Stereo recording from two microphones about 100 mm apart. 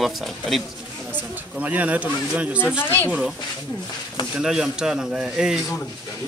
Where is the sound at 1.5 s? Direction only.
15° right (ahead or behind).